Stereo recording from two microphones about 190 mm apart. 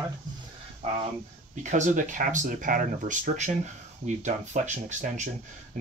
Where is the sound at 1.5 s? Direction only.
40° right (ahead or behind).